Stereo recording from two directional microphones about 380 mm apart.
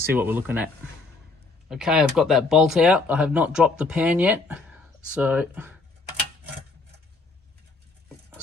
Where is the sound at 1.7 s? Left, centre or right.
Centre.